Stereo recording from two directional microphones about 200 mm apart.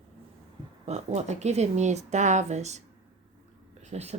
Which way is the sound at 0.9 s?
35° right (ahead or behind).